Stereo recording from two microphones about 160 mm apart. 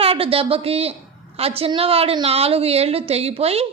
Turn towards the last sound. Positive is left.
turn(degrees=-40)  # may be behind; listen again after turning